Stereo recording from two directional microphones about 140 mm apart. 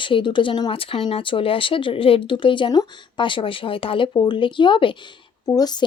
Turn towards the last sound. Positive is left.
turn(degrees=25)  # may be behind; listen again after turning